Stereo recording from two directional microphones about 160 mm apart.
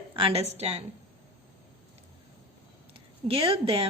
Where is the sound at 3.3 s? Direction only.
35° right (ahead or behind).